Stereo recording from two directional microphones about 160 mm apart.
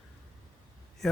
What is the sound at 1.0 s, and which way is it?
Speech, 5° left (ahead or behind).